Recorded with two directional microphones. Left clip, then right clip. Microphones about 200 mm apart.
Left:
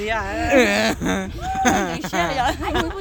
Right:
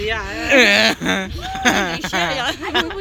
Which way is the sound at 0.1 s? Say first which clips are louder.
Even; 35° left (ahead or behind).